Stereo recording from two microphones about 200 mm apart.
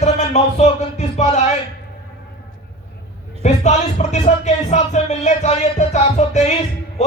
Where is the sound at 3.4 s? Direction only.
35° left (ahead or behind).